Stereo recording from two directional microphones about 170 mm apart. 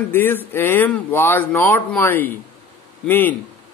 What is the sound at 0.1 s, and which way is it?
Speech, 10° left (ahead or behind).